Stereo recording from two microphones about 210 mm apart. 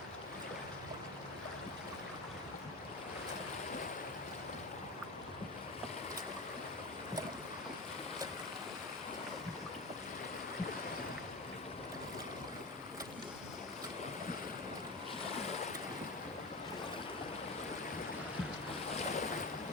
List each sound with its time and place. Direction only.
15.4 s waves: 30° left (ahead or behind)
18.9 s boat: 30° left (ahead or behind)